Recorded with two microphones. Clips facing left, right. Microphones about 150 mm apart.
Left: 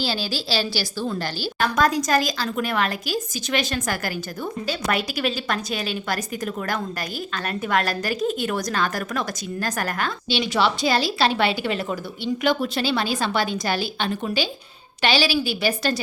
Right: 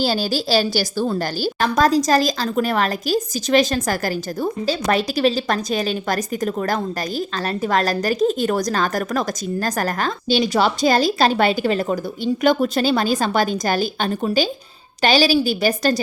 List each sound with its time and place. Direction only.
0.0 s a woman's voice: 45° right (ahead or behind)